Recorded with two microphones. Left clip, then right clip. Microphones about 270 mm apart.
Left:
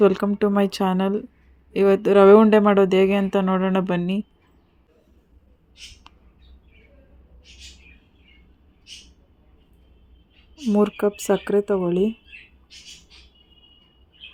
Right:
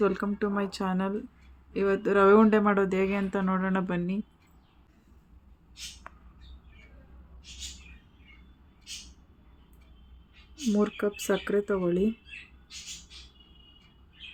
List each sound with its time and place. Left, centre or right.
0.0 s speech: left
10.7 s speech: centre